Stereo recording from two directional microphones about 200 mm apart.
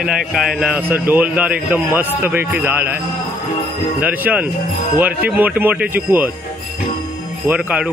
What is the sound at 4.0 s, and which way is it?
Speech, 10° right (ahead or behind).